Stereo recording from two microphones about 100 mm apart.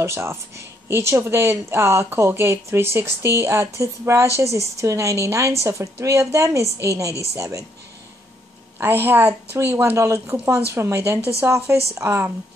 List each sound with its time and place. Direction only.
0.0 s a woman's voice: 25° right (ahead or behind)
8.7 s speech: 20° right (ahead or behind)
11.1 s speech: 30° left (ahead or behind)
11.4 s speech: 25° right (ahead or behind)